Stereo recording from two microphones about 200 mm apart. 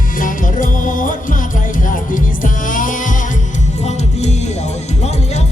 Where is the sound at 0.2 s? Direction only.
40° left (ahead or behind).